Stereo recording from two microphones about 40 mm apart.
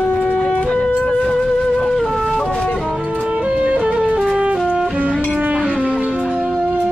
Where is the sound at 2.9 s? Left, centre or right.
Right.